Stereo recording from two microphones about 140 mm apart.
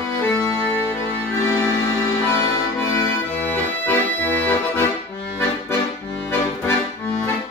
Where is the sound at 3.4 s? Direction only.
15° left (ahead or behind).